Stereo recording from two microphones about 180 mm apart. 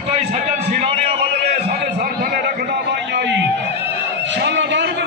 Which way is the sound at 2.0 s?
60° right (ahead or behind).